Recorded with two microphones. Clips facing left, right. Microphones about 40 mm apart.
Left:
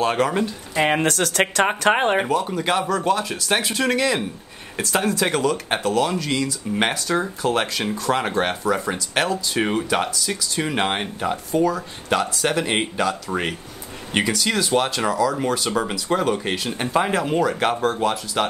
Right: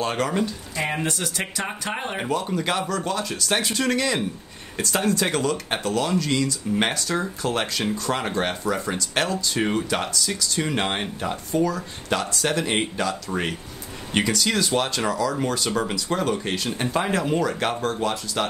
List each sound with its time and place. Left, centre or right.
0.0 s speech: centre
1.0 s speech: left
2.2 s speech: centre